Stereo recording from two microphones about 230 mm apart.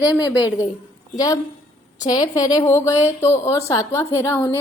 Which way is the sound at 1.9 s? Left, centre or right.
Centre.